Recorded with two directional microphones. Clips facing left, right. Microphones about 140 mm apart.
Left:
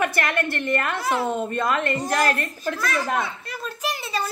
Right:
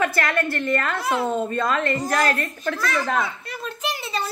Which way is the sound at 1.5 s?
25° left (ahead or behind).